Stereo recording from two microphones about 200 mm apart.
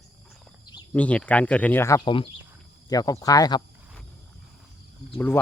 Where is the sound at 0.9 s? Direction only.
5° left (ahead or behind).